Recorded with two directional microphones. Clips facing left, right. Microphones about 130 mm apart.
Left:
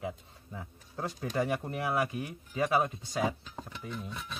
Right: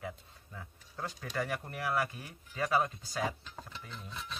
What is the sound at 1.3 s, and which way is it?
Speech, 20° left (ahead or behind).